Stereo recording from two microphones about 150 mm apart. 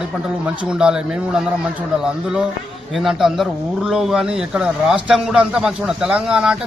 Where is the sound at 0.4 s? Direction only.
5° right (ahead or behind).